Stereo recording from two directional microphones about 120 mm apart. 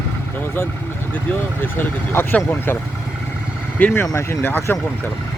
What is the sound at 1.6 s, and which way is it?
Speech, 20° left (ahead or behind).